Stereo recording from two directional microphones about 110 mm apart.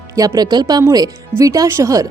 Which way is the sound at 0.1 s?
35° right (ahead or behind).